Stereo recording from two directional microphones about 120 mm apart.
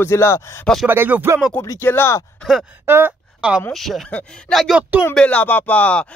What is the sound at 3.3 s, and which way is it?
Speech, 5° right (ahead or behind).